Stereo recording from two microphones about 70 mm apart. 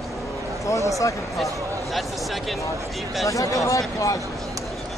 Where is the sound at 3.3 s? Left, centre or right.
Left.